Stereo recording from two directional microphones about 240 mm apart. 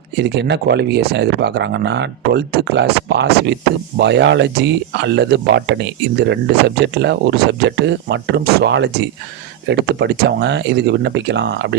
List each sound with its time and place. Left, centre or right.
0.2 s speech: right
8.6 s speech: right